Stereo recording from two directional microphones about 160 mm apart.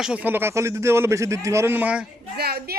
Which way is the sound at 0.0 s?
10° right (ahead or behind).